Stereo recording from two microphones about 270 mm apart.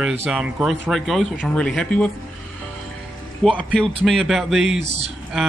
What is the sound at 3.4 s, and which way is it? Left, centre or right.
Speech, centre.